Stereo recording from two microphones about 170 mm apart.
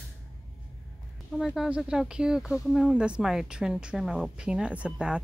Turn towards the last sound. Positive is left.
turn(degrees=-5)  # may be behind; listen again after turning